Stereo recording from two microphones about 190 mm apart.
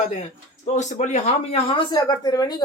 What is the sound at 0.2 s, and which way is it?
Speech, 40° left (ahead or behind).